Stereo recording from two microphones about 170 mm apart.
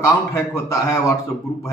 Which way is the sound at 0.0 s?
15° left (ahead or behind).